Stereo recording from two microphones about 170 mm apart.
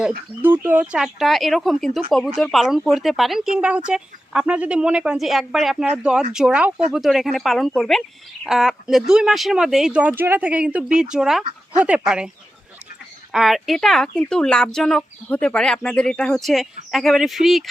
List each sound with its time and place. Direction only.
0.4 s speech: 10° right (ahead or behind)
13.3 s speech: centre (ahead or behind)